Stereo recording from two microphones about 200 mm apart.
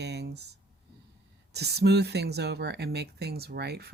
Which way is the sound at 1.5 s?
55° right (ahead or behind).